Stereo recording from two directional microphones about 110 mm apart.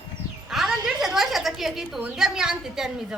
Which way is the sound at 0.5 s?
Centre (ahead or behind).